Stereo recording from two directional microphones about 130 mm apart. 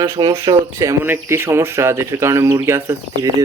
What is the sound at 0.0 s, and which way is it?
Speech, 30° right (ahead or behind).